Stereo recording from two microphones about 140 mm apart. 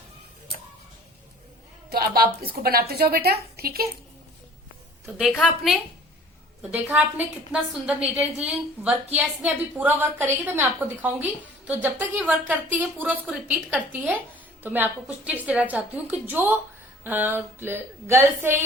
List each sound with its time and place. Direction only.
1.9 s a woman's voice: 90° right
5.0 s a woman's voice: centre (ahead or behind)
6.6 s a woman's voice: 10° right (ahead or behind)